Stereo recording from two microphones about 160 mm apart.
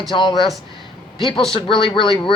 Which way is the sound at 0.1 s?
30° left (ahead or behind).